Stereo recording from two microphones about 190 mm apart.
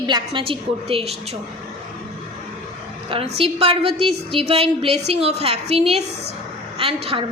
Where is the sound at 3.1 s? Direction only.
30° right (ahead or behind).